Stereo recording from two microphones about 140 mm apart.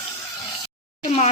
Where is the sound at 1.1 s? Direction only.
50° left (ahead or behind).